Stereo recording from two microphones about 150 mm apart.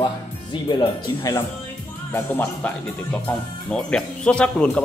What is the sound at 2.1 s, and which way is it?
Speech, 15° left (ahead or behind).